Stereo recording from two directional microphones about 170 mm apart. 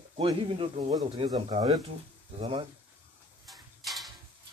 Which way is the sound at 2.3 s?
35° right (ahead or behind).